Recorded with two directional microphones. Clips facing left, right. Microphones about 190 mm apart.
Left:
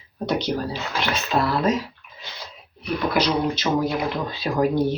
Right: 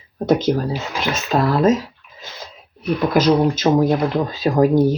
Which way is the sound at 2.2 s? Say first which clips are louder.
Right 3 dB; 45° right (ahead or behind).